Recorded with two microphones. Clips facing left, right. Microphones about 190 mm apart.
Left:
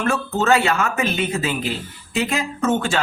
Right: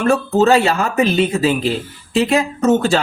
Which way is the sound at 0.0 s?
35° right (ahead or behind).